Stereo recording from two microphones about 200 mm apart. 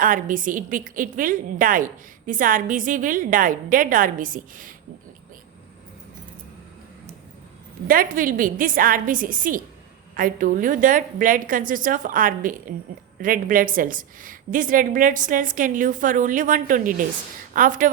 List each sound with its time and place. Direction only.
0.0 s a woman's voice: 40° right (ahead or behind)
7.9 s a woman's voice: 45° right (ahead or behind)